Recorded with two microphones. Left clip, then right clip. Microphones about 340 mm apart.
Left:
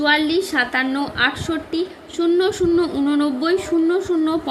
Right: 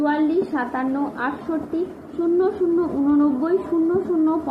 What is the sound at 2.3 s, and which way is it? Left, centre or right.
A woman's voice, left.